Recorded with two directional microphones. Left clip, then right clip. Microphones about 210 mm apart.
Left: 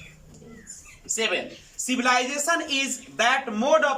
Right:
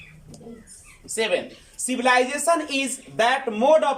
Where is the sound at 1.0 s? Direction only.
20° right (ahead or behind).